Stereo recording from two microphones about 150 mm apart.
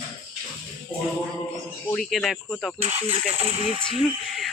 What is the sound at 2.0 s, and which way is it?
Speech, centre (ahead or behind).